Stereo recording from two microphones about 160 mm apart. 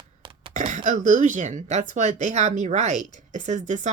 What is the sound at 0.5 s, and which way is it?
Speech, 50° right (ahead or behind).